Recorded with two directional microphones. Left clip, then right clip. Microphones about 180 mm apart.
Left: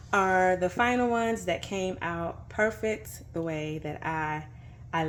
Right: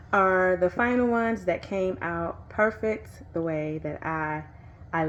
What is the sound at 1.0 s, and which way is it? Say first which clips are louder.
Speech: right 2 dB; 35° right (ahead or behind).